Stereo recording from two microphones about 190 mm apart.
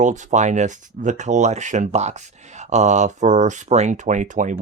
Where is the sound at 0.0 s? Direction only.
40° right (ahead or behind).